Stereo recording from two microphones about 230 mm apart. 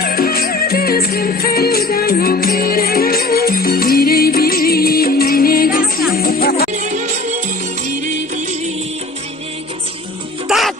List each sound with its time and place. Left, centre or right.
0.0 s music: left
6.7 s music: right
10.5 s music: centre